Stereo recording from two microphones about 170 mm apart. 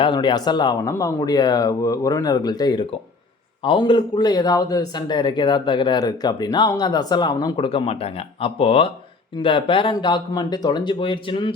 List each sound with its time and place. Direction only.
0.0 s speech: 25° left (ahead or behind)